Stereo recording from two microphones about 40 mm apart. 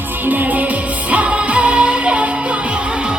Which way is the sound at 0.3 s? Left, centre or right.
Right.